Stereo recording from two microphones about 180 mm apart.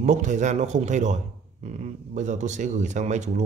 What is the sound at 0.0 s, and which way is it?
A man's voice, 40° right (ahead or behind).